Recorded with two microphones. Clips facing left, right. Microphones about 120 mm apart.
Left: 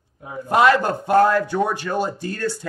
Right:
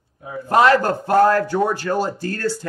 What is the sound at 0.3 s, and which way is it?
Speech, 15° left (ahead or behind).